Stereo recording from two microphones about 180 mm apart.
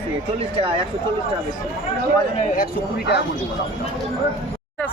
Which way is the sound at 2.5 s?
60° left (ahead or behind).